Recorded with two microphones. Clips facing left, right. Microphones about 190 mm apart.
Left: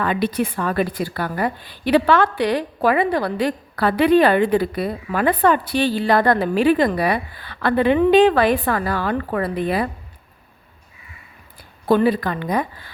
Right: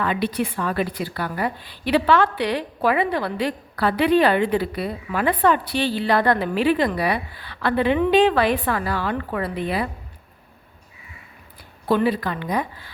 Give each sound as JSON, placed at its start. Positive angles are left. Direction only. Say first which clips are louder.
{"t": 0.0, "sound": "a woman's voice", "louder": "left 2 dB", "side_deg": 45}
{"t": 11.9, "sound": "a woman's voice", "louder": "left 3 dB", "side_deg": 45}